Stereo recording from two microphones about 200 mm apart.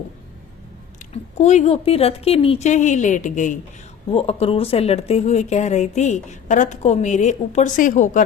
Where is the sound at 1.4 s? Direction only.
35° left (ahead or behind).